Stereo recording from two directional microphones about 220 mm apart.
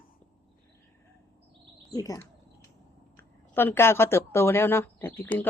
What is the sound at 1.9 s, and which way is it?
Speech, 15° left (ahead or behind).